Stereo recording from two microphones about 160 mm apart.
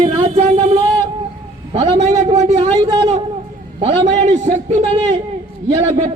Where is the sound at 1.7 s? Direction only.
40° right (ahead or behind).